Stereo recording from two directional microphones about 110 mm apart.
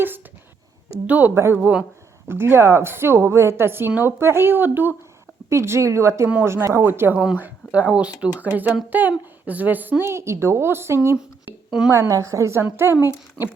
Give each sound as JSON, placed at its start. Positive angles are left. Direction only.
{"t": 1.0, "sound": "a woman's voice", "side_deg": -15}